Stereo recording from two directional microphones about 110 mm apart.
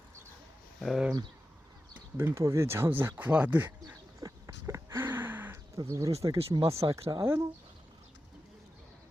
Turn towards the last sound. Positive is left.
turn(degrees=-25)  # may be behind; listen again after turning